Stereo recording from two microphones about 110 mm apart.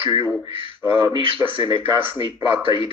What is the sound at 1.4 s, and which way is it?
Synthetic singing, 15° right (ahead or behind).